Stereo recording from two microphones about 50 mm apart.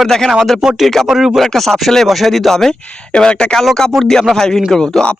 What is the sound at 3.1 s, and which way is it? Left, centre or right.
Speech, centre.